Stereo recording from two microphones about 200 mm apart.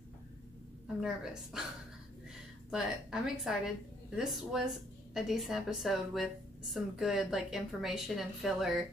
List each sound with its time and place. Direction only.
1.0 s a woman's voice: 5° right (ahead or behind)
2.7 s a woman's voice: centre (ahead or behind)